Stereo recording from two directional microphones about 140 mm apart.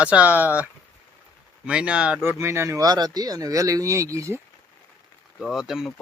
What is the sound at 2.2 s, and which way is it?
Speech, 20° right (ahead or behind).